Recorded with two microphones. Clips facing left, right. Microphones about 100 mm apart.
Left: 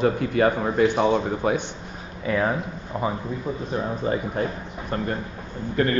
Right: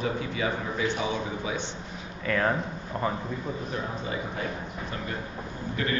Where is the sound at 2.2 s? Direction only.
15° left (ahead or behind).